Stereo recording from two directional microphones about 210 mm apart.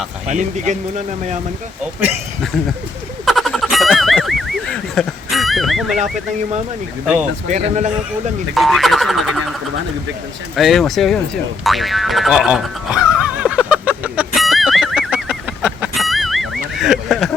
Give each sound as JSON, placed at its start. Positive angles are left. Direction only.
{"t": 0.3, "sound": "speech", "side_deg": -35}
{"t": 3.2, "sound": "a sound", "side_deg": 0}
{"t": 7.4, "sound": "speech", "side_deg": -35}
{"t": 8.5, "sound": "music", "side_deg": 0}
{"t": 11.6, "sound": "boing", "side_deg": 0}
{"t": 16.7, "sound": "a sound", "side_deg": 0}